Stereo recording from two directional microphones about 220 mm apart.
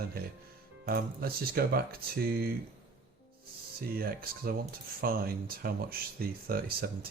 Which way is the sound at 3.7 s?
45° right (ahead or behind).